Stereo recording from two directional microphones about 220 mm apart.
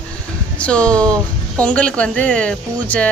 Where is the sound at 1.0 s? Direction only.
15° right (ahead or behind).